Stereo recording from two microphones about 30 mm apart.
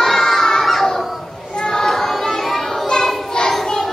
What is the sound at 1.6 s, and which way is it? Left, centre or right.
Child singing, left.